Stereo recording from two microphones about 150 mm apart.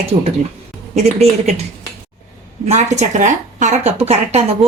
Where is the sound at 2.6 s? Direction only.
50° right (ahead or behind).